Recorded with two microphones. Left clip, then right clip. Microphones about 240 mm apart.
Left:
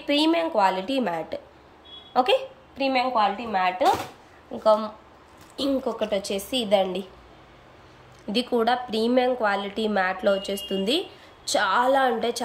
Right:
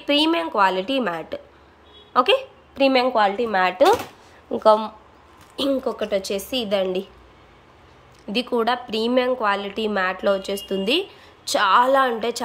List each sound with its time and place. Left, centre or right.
0.0 s a woman's voice: centre
8.3 s a woman's voice: centre